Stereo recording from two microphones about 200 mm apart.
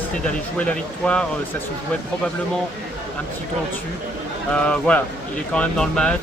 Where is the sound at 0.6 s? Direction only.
5° left (ahead or behind).